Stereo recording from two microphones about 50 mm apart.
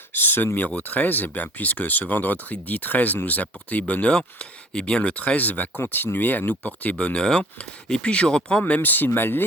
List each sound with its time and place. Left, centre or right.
0.1 s speech: left
5.8 s speech: left; by 8.6 s centre
8.6 s speech: left